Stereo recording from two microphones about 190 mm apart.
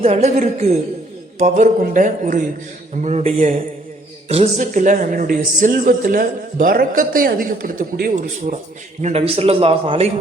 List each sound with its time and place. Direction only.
0.0 s a man's voice: 35° right (ahead or behind)
9.0 s a man's voice: 35° right (ahead or behind)